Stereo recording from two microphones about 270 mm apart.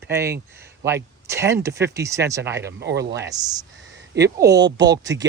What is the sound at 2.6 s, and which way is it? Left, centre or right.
Speech, right.